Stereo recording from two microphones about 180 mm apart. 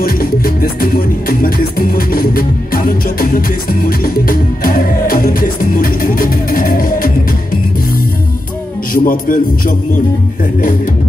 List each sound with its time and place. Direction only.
0.0 s music: 55° left (ahead or behind)
8.9 s music: 50° left (ahead or behind)